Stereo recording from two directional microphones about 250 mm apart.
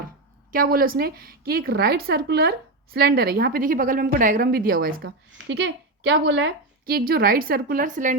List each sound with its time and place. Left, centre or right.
0.5 s a woman's voice: right